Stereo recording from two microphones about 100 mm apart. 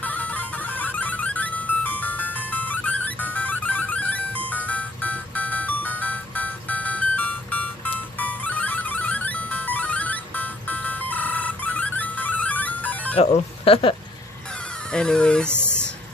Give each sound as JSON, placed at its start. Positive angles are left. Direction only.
{"t": 0.0, "sound": "music", "side_deg": 15}
{"t": 13.1, "sound": "speech", "side_deg": 75}
{"t": 14.9, "sound": "speech", "side_deg": 10}
{"t": 15.5, "sound": "a sound", "side_deg": -20}